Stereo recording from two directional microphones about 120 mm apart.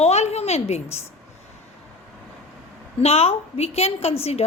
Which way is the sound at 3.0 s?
55° left (ahead or behind).